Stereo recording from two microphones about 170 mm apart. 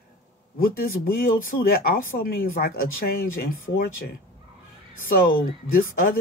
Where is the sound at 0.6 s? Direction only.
60° left (ahead or behind).